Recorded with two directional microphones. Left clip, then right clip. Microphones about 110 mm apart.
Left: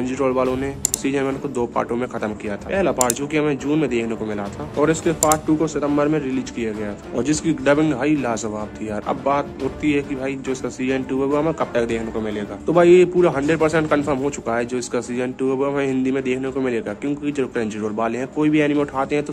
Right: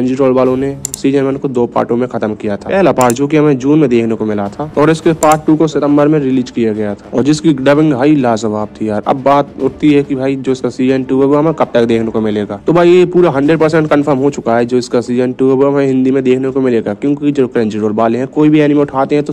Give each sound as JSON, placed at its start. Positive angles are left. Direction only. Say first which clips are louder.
{"t": 0.0, "sound": "speech", "louder": "right 9 dB", "side_deg": -35}
{"t": 2.4, "sound": "speech", "louder": "right 10 dB", "side_deg": -55}
{"t": 5.9, "sound": "speech", "louder": "right 10 dB", "side_deg": -40}